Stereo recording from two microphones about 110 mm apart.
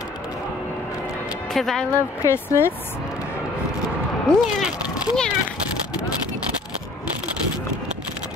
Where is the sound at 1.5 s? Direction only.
5° left (ahead or behind).